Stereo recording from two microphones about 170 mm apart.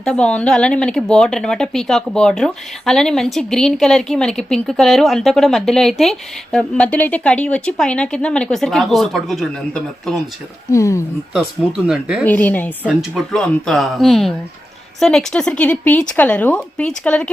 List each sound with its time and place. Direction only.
0.0 s speech: 5° left (ahead or behind)
10.7 s speech: 20° left (ahead or behind)
11.9 s speech: 5° right (ahead or behind)
12.2 s speech: 10° left (ahead or behind)
12.9 s speech: centre (ahead or behind)